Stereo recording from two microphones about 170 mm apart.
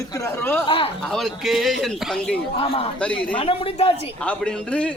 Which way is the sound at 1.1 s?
Centre (ahead or behind).